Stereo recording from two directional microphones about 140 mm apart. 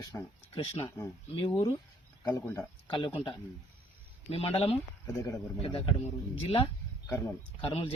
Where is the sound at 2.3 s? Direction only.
20° left (ahead or behind).